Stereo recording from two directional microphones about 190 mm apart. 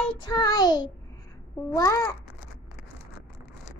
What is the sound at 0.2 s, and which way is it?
Child singing, 20° left (ahead or behind).